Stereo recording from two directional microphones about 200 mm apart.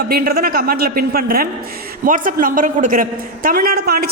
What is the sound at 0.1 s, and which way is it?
A woman's voice, 50° right (ahead or behind).